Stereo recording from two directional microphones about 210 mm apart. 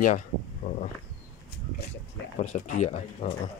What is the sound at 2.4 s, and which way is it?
Speech, 35° left (ahead or behind).